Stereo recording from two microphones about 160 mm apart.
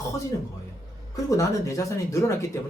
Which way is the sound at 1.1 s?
20° left (ahead or behind).